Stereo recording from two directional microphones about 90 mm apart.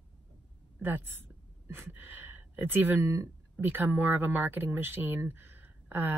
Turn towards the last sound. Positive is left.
turn(degrees=-20)  # may be behind; listen again after turning